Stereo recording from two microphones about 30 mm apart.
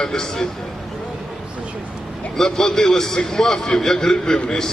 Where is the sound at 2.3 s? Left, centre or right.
Centre.